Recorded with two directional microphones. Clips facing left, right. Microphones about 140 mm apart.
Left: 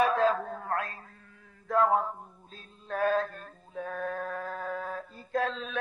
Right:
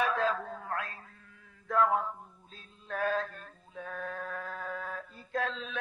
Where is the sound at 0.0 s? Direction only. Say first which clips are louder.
Left 5 dB; 40° left (ahead or behind).